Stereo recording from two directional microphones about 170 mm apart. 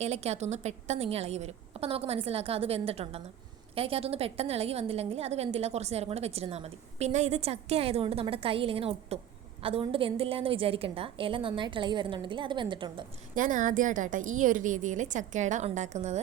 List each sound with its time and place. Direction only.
0.0 s a woman's voice: 40° right (ahead or behind)
13.3 s a woman's voice: 50° right (ahead or behind)